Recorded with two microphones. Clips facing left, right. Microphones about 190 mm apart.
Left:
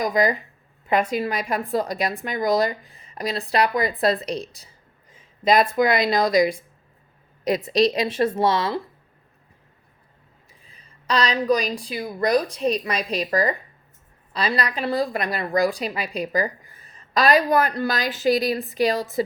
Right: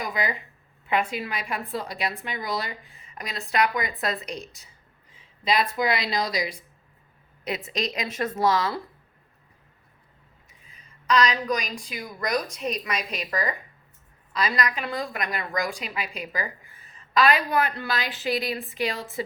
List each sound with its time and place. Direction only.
0.0 s a woman's voice: 40° left (ahead or behind)
5.1 s speech: 45° left (ahead or behind)
7.4 s a woman's voice: 35° left (ahead or behind)
10.6 s a woman's voice: 35° left (ahead or behind)